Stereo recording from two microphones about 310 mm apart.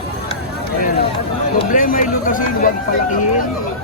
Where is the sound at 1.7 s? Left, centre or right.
Left.